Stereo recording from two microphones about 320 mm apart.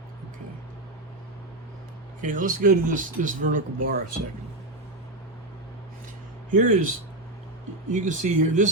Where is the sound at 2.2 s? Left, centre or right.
Right.